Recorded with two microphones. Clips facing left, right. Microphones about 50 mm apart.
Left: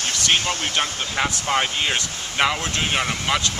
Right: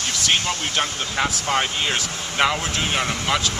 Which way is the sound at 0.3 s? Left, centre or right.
Centre.